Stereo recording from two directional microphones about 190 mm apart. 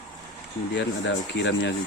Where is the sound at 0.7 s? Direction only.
70° left (ahead or behind).